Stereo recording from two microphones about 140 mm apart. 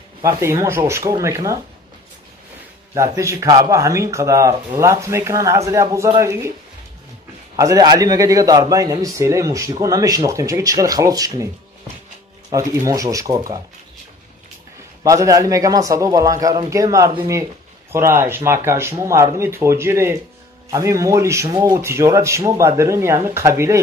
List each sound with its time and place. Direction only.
0.2 s a man's voice: 20° right (ahead or behind)
2.9 s a man's voice: 20° right (ahead or behind)
7.5 s a man's voice: 25° right (ahead or behind)
12.4 s a man's voice: 25° right (ahead or behind)
15.0 s a man's voice: 25° right (ahead or behind)